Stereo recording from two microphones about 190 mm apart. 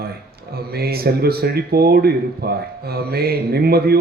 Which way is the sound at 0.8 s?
55° right (ahead or behind).